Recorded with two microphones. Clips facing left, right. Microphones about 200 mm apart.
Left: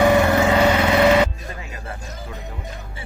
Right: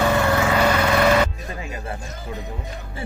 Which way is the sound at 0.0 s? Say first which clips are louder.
Left 4 dB; 15° left (ahead or behind).